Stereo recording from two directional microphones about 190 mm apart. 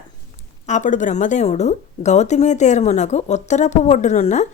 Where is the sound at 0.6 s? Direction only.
40° left (ahead or behind).